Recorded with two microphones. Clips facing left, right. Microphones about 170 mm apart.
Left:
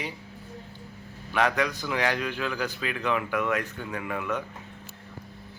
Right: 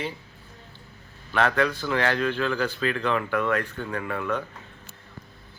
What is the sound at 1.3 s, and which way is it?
Speech, 10° left (ahead or behind).